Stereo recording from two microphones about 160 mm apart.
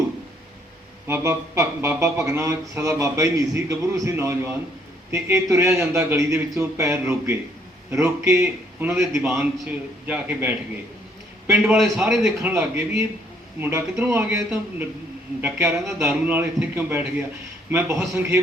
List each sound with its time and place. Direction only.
1.0 s a man's voice: 15° right (ahead or behind)
8.9 s a man's voice: 5° right (ahead or behind)
11.6 s a man's voice: 5° right (ahead or behind)